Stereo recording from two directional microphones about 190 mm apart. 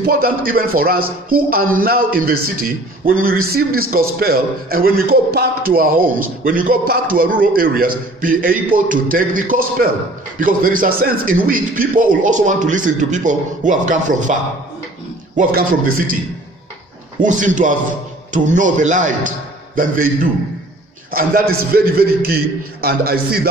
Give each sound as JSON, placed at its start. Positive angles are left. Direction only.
{"t": 0.0, "sound": "a man's voice", "side_deg": -50}
{"t": 17.2, "sound": "a man's voice", "side_deg": -40}
{"t": 21.1, "sound": "a man's voice", "side_deg": -50}